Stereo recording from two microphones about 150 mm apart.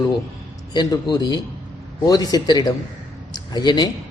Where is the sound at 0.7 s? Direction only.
30° left (ahead or behind).